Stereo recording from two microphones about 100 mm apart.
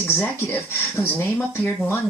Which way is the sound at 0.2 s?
20° left (ahead or behind).